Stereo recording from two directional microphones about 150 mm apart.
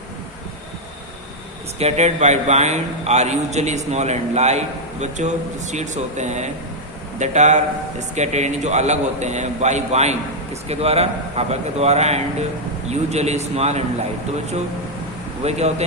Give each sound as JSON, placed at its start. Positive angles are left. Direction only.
{"t": 1.8, "sound": "a man's voice", "side_deg": -50}
{"t": 15.4, "sound": "a man's voice", "side_deg": -45}